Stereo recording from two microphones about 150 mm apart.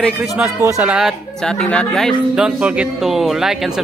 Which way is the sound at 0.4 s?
20° right (ahead or behind).